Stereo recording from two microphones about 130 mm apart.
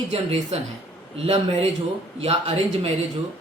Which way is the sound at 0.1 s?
50° right (ahead or behind).